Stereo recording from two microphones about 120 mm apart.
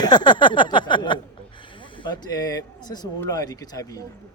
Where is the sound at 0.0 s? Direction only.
40° left (ahead or behind).